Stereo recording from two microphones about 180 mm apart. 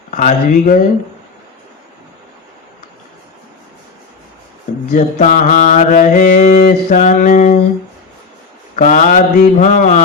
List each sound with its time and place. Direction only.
0.1 s mantra: 45° left (ahead or behind)
4.9 s mantra: 40° left (ahead or behind)
8.7 s mantra: 45° left (ahead or behind)